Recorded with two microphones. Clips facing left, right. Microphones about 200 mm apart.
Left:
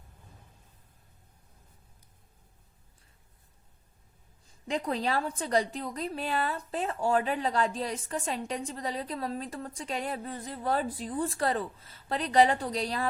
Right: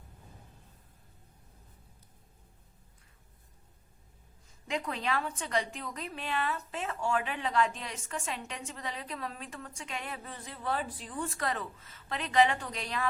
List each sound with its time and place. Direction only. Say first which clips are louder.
4.7 s a woman's voice: left 4 dB; 35° left (ahead or behind)